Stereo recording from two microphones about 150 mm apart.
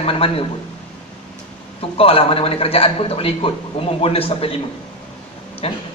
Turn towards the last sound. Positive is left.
turn(degrees=40)  # may be behind; listen again after turning